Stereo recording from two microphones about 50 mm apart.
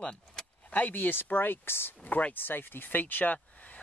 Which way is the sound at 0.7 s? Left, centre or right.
Left.